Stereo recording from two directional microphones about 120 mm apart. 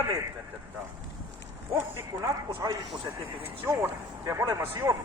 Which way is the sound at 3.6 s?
25° right (ahead or behind).